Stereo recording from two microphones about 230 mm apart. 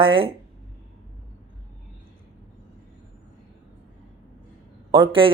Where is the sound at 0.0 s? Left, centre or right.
Right.